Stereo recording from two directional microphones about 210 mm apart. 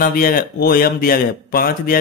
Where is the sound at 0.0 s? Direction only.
45° left (ahead or behind).